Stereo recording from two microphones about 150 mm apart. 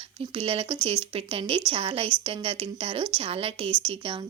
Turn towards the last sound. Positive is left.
turn(degrees=-35)  # may be behind; listen again after turning